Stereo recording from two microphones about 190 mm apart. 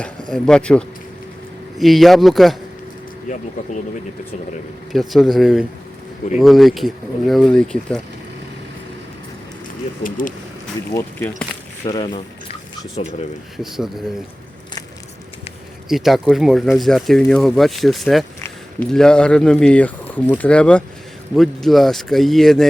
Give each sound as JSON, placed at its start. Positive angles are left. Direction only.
{"t": 0.3, "sound": "speech", "side_deg": 5}
{"t": 4.9, "sound": "speech", "side_deg": 0}
{"t": 10.0, "sound": "speech", "side_deg": 45}
{"t": 10.9, "sound": "speech", "side_deg": 10}
{"t": 11.9, "sound": "speech", "side_deg": 25}
{"t": 13.6, "sound": "speech", "side_deg": 0}
{"t": 15.9, "sound": "speech", "side_deg": 0}